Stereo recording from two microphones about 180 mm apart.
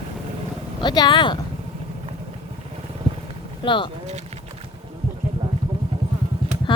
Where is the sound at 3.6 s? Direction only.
30° left (ahead or behind).